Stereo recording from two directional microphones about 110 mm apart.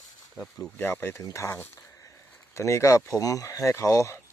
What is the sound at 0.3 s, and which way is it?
Speech, 10° left (ahead or behind).